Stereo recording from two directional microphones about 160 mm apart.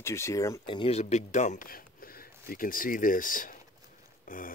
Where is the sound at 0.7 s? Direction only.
35° left (ahead or behind).